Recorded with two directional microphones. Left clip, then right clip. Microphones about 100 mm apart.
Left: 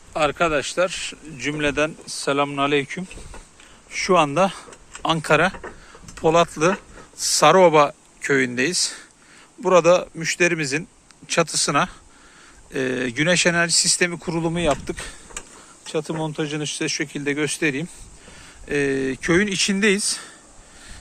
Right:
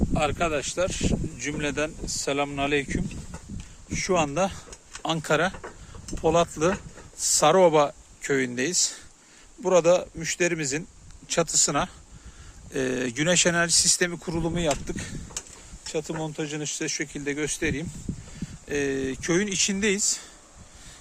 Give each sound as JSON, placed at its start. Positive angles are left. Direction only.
{"t": 0.1, "sound": "speech", "side_deg": -15}
{"t": 2.0, "sound": "speech", "side_deg": -15}
{"t": 3.8, "sound": "speech", "side_deg": -5}
{"t": 5.0, "sound": "a man's voice", "side_deg": -30}
{"t": 12.7, "sound": "speech", "side_deg": -60}
{"t": 14.5, "sound": "speech", "side_deg": -20}